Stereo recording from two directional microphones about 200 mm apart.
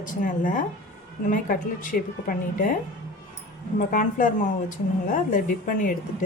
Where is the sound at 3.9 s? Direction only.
40° left (ahead or behind).